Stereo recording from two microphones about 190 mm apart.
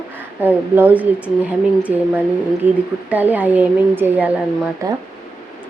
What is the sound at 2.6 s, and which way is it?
Speech, 10° right (ahead or behind).